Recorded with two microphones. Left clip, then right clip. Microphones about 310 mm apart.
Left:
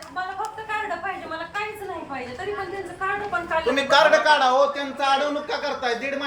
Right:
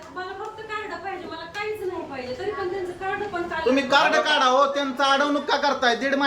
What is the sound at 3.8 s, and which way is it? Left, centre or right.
Speech, centre.